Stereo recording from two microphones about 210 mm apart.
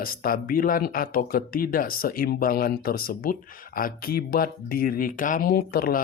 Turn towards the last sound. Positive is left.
turn(degrees=45)  # may be behind; listen again after turning